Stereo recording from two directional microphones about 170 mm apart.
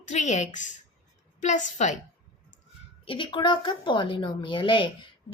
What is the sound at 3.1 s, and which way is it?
A woman's voice, 30° left (ahead or behind).